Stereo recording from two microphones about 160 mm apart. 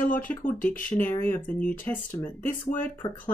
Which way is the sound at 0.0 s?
10° left (ahead or behind).